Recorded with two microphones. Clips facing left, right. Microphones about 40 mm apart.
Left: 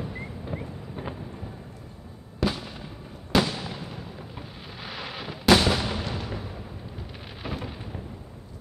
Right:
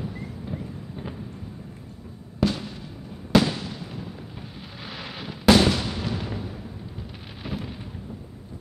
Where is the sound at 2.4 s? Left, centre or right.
Centre.